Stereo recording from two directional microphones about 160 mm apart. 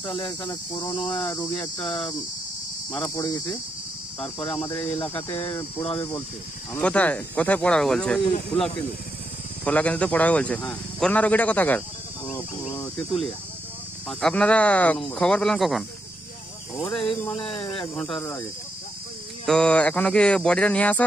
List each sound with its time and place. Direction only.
0.0 s cricket: 30° left (ahead or behind)
0.9 s a man's voice: 5° left (ahead or behind)
3.2 s cricket: 25° left (ahead or behind)
4.4 s cricket: 35° left (ahead or behind)
4.6 s a man's voice: 10° left (ahead or behind)
5.8 s cricket: 35° left (ahead or behind)
6.8 s a man's voice: 10° left (ahead or behind)
9.7 s a man's voice: 10° left (ahead or behind)
17.3 s cricket: 35° left (ahead or behind)
17.9 s speech: 5° left (ahead or behind)
19.4 s a man's voice: 5° left (ahead or behind)